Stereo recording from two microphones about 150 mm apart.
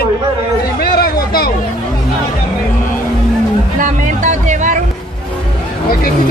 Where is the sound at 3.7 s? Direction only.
55° right (ahead or behind).